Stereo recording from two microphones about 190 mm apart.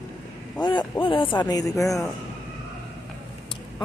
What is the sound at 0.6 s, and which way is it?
Speech, 25° left (ahead or behind).